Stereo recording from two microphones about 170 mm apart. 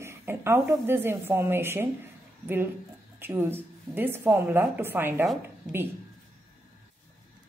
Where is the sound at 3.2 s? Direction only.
15° right (ahead or behind).